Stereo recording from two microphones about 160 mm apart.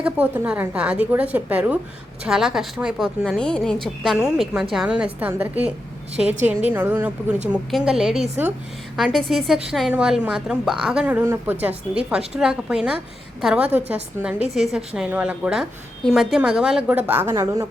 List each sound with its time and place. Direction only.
0.0 s a woman's voice: 10° right (ahead or behind)